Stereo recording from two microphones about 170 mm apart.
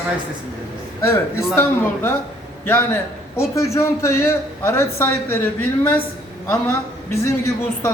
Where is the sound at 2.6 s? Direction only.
15° left (ahead or behind).